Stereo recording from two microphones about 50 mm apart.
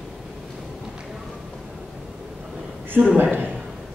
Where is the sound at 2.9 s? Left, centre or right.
Right.